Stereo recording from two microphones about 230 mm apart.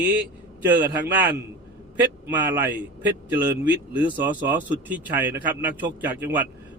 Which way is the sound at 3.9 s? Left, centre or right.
Centre.